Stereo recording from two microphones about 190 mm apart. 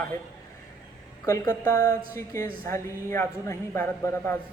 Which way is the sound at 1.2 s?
20° left (ahead or behind).